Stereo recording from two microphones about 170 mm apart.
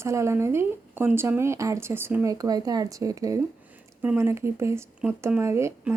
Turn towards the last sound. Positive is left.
turn(degrees=-15)  # may be behind; listen again after turning